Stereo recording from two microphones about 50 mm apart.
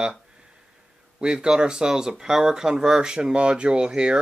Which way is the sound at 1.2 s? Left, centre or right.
Centre.